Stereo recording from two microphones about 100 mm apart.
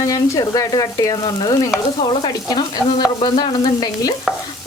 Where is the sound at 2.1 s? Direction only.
60° left (ahead or behind).